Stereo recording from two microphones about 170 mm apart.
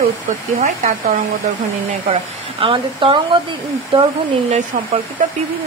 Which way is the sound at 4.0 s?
40° right (ahead or behind).